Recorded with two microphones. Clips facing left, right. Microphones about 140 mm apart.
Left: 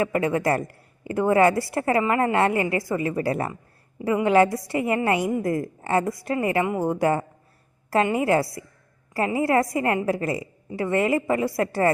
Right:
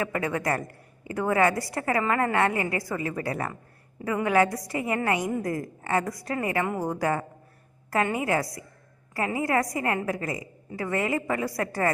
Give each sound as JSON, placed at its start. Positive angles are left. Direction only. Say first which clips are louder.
{"t": 0.0, "sound": "a woman's voice", "louder": "left 5 dB", "side_deg": 25}